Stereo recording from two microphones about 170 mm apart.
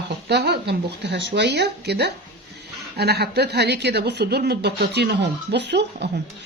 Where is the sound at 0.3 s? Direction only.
75° right (ahead or behind).